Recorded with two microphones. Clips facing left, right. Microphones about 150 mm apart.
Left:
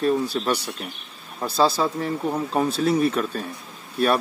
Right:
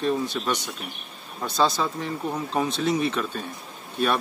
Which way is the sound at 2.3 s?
5° left (ahead or behind).